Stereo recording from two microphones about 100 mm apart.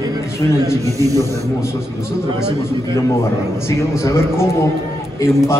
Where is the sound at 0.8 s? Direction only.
35° right (ahead or behind).